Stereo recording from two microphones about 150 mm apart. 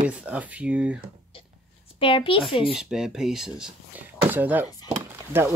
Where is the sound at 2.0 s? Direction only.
35° left (ahead or behind).